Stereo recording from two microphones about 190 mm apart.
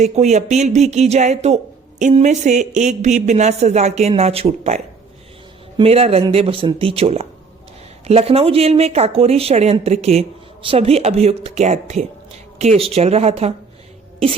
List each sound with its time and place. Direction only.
0.0 s speech: 35° right (ahead or behind)